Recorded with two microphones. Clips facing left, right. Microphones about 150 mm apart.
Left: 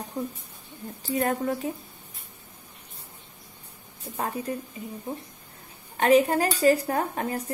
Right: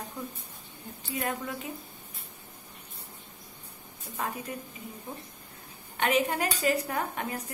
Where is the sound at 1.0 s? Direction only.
40° left (ahead or behind).